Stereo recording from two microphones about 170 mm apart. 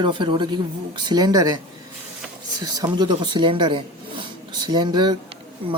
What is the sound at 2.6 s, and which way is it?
Speech, 20° right (ahead or behind).